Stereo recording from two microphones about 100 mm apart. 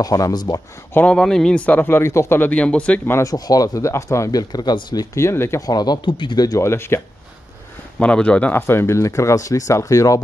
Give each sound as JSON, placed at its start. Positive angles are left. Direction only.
{"t": 0.0, "sound": "speech", "side_deg": 40}
{"t": 1.1, "sound": "speech", "side_deg": 5}
{"t": 2.5, "sound": "speech", "side_deg": 10}
{"t": 3.1, "sound": "speech", "side_deg": 30}
{"t": 5.1, "sound": "speech", "side_deg": 25}
{"t": 5.7, "sound": "speech", "side_deg": 40}
{"t": 6.0, "sound": "speech", "side_deg": 55}
{"t": 6.6, "sound": "speech", "side_deg": 25}
{"t": 8.0, "sound": "speech", "side_deg": 10}